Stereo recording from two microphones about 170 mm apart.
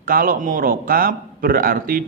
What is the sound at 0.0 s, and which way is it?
Speech, 55° right (ahead or behind).